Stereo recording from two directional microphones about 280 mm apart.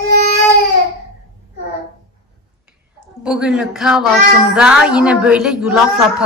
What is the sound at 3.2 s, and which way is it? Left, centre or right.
A child's voice, centre.